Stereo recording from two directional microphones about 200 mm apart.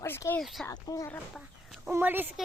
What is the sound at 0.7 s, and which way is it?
Speech, 15° left (ahead or behind).